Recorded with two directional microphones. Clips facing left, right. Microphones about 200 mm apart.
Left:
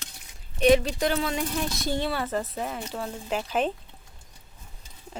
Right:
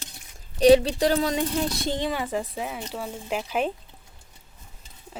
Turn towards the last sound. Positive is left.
turn(degrees=-10)  # may be behind; listen again after turning